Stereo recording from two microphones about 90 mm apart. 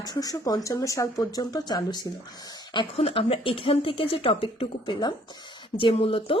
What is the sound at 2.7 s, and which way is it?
Speech, 75° left (ahead or behind).